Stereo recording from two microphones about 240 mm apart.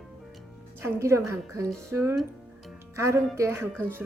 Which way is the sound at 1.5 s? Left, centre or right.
Centre.